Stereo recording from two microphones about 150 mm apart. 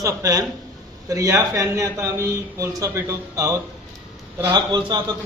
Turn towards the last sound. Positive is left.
turn(degrees=-30)  # may be behind; listen again after turning